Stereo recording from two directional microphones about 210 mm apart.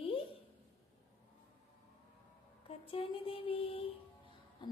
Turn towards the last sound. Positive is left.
turn(degrees=20)  # may be behind; listen again after turning